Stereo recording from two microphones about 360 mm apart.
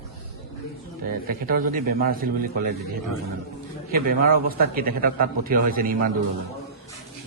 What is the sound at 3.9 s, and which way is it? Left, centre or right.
A man's voice, right.